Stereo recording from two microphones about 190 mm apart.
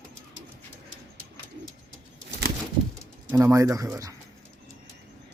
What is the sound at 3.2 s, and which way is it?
Speech, 15° right (ahead or behind).